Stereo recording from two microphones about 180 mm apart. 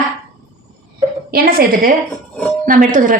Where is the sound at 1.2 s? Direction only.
55° right (ahead or behind).